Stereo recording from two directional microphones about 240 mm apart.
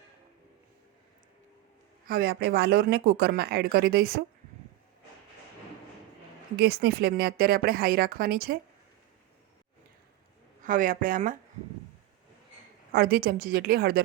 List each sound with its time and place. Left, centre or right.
2.0 s speech: right
6.6 s speech: right
10.6 s speech: right
12.9 s speech: right